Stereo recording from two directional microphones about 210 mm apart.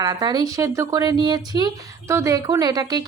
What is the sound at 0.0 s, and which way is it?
A woman's voice, 20° right (ahead or behind).